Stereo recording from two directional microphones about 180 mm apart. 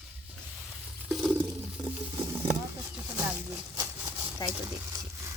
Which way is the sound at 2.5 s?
10° right (ahead or behind).